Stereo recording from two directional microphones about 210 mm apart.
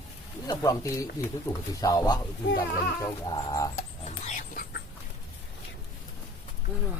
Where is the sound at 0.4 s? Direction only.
15° left (ahead or behind).